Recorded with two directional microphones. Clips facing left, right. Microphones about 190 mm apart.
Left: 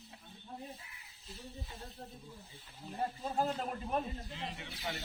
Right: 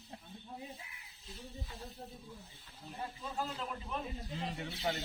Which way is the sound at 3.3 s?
50° left (ahead or behind).